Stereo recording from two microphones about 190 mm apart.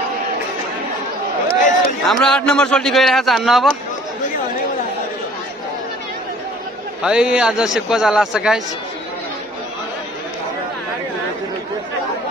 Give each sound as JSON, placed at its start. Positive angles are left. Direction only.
{"t": 1.5, "sound": "a sound", "side_deg": 40}
{"t": 2.0, "sound": "a man's voice", "side_deg": 5}
{"t": 7.0, "sound": "a man's voice", "side_deg": -5}